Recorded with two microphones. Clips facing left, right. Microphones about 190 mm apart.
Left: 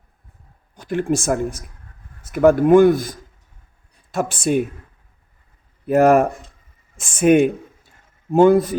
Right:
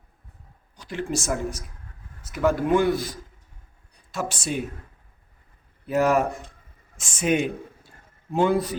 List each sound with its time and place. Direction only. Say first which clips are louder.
0.8 s speech: left 8 dB; 50° left (ahead or behind)
5.8 s speech: left 7 dB; 55° left (ahead or behind)